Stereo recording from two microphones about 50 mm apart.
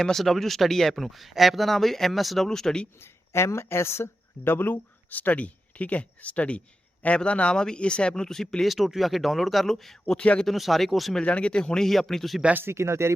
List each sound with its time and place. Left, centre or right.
0.0 s speech: centre
2.5 s speech: centre
3.0 s speech: left
5.1 s speech: left; by 10.2 s centre
10.2 s speech: left
10.4 s speech: centre
11.1 s speech: left
11.9 s speech: centre
12.7 s speech: right